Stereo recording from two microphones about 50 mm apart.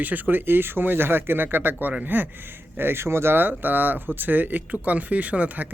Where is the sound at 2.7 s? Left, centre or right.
Right.